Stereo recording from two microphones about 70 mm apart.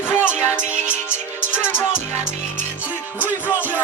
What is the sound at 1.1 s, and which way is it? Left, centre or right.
Music, left.